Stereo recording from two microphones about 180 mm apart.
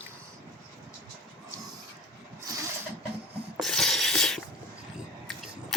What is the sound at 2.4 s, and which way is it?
Vehicle, 20° right (ahead or behind).